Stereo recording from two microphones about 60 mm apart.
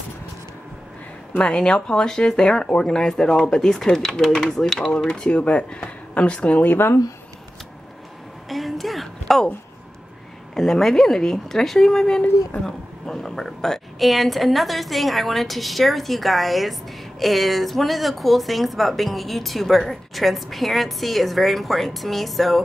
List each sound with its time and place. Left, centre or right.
1.3 s speech: centre
4.7 s speech: centre; by 7.0 s left
8.5 s a sound: centre
10.5 s speech: centre